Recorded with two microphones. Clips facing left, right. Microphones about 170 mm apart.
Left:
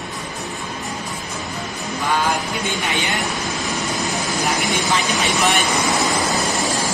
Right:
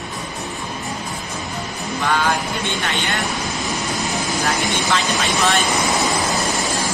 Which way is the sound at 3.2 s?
Centre (ahead or behind).